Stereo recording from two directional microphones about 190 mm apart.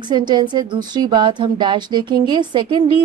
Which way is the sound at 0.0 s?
25° right (ahead or behind).